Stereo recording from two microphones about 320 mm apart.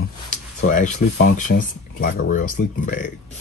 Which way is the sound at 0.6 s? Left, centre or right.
Left.